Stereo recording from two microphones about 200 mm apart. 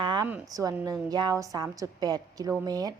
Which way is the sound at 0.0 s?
20° right (ahead or behind).